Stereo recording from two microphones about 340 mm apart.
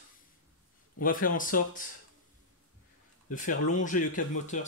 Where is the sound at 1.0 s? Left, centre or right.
Left.